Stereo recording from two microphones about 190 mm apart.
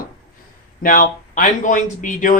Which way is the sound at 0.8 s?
45° left (ahead or behind).